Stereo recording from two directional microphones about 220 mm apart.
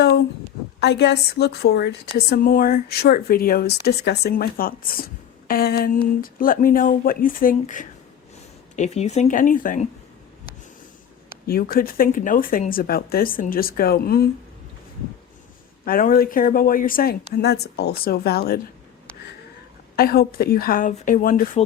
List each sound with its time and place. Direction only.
0.8 s a woman's voice: 50° left (ahead or behind)
11.4 s speech: 40° left (ahead or behind)
15.8 s a woman's voice: 40° left (ahead or behind)
20.0 s speech: 45° left (ahead or behind)